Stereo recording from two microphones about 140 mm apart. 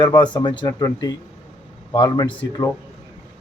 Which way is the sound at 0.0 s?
30° left (ahead or behind).